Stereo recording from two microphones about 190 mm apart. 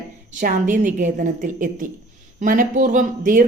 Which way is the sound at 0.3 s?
45° right (ahead or behind).